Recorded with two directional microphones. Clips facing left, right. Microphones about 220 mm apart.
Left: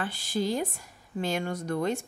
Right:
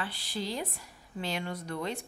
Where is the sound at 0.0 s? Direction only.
45° left (ahead or behind).